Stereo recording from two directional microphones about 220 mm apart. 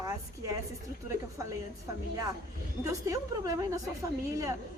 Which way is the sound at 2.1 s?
15° right (ahead or behind).